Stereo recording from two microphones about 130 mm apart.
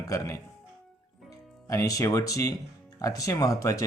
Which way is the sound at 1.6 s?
25° left (ahead or behind).